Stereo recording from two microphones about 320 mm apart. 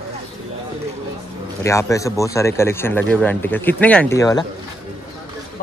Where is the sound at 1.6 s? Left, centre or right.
Centre.